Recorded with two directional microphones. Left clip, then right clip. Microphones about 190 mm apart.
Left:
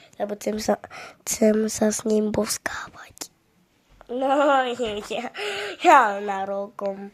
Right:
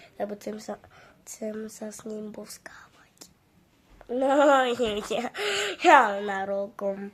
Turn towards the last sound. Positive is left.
turn(degrees=0)  # may be behind; listen again after turning